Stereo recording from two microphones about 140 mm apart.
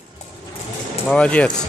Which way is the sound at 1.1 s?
10° left (ahead or behind).